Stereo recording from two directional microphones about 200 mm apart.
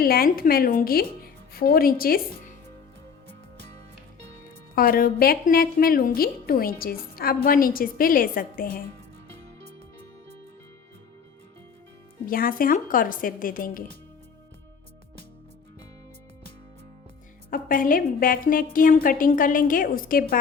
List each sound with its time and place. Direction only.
0.0 s a woman's voice: 45° left (ahead or behind)
4.7 s a woman's voice: 45° left (ahead or behind)
12.2 s a woman's voice: 45° left (ahead or behind)
17.5 s a woman's voice: 45° left (ahead or behind)